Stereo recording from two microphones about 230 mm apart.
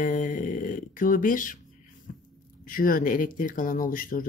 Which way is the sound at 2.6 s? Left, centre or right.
Left.